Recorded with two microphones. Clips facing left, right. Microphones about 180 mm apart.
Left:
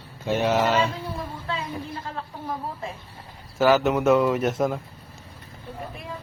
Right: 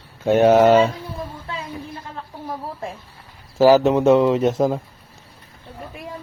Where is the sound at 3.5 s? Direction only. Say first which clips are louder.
Right 6 dB; 30° right (ahead or behind).